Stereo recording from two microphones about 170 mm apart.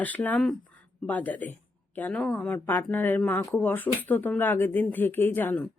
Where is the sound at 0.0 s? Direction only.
10° left (ahead or behind).